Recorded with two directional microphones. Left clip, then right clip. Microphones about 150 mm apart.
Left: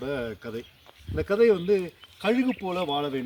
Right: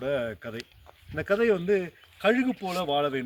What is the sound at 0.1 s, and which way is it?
A man's voice, 45° right (ahead or behind).